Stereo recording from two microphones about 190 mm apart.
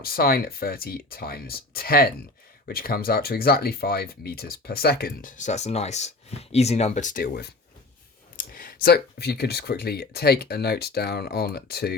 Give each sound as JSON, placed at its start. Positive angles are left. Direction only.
{"t": 0.0, "sound": "speech", "side_deg": 50}